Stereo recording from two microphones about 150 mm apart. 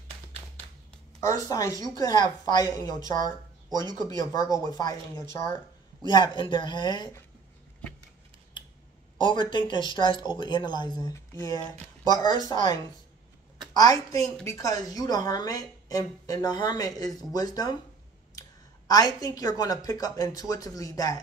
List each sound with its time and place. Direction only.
1.2 s a woman's voice: 25° left (ahead or behind)
6.0 s speech: 30° left (ahead or behind)
9.2 s a woman's voice: 30° left (ahead or behind)
13.7 s a woman's voice: 25° left (ahead or behind)
18.9 s a woman's voice: 25° left (ahead or behind)